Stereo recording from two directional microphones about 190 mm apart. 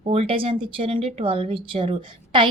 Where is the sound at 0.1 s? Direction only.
30° right (ahead or behind).